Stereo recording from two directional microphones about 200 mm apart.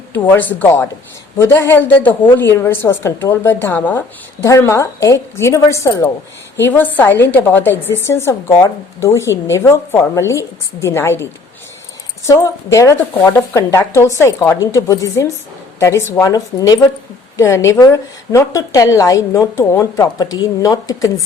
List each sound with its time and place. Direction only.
0.1 s a woman's voice: 10° left (ahead or behind)